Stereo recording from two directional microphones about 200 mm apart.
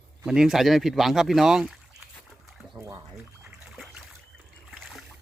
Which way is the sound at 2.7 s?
15° right (ahead or behind).